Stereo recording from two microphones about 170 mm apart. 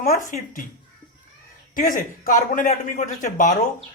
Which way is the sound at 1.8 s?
55° left (ahead or behind).